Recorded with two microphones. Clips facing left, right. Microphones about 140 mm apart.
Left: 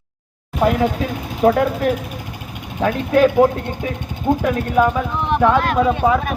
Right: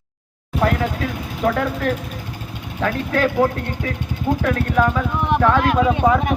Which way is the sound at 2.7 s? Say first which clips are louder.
Left 5 dB; 20° left (ahead or behind).